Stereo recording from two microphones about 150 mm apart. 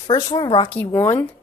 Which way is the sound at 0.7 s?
10° left (ahead or behind).